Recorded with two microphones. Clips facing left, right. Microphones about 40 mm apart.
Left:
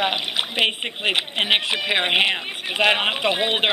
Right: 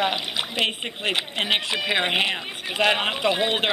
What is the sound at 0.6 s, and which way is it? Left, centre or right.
Speech, left.